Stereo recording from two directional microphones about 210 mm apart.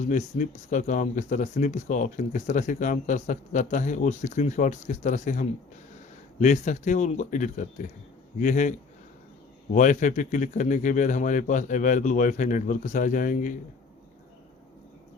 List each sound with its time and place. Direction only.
0.0 s speech: 35° left (ahead or behind)
9.7 s speech: 35° left (ahead or behind)